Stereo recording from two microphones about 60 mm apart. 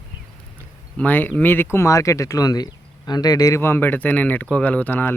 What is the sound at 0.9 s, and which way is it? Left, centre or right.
Speech, left.